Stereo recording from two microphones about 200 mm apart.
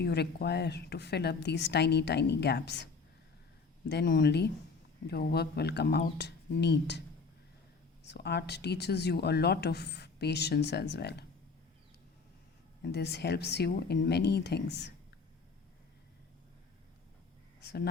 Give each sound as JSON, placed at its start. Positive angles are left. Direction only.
{"t": 0.0, "sound": "speech", "side_deg": 55}
{"t": 8.0, "sound": "speech", "side_deg": 55}
{"t": 12.8, "sound": "speech", "side_deg": 55}